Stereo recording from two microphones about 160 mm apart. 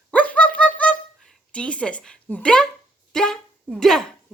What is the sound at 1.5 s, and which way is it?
Speech, 5° left (ahead or behind).